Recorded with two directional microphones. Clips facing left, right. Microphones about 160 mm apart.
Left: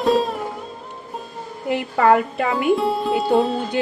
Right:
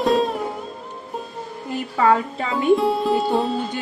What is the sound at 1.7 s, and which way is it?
Speech, 65° left (ahead or behind).